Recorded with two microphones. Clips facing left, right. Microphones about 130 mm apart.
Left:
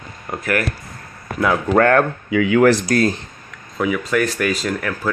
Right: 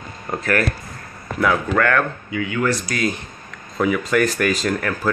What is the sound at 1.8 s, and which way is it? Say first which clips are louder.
Speech: left 7 dB; 35° left (ahead or behind).